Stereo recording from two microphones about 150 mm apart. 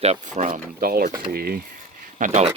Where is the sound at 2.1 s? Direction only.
50° right (ahead or behind).